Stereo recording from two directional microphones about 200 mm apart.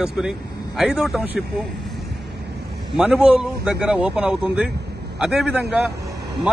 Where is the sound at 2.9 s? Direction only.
Centre (ahead or behind).